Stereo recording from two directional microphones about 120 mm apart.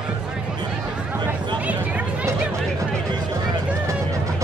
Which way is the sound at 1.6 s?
10° right (ahead or behind).